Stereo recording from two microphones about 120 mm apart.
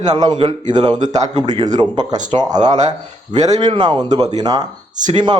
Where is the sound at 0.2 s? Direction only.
40° right (ahead or behind).